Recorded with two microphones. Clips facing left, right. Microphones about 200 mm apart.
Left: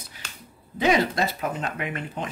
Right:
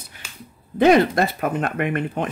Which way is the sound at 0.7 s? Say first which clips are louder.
Right 7 dB; 55° right (ahead or behind).